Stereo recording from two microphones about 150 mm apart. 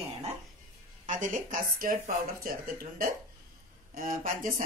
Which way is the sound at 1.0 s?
60° right (ahead or behind).